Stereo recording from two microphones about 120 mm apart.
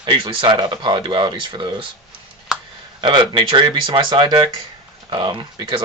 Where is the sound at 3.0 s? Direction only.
40° right (ahead or behind).